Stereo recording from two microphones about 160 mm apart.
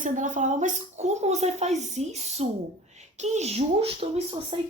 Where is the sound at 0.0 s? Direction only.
50° right (ahead or behind).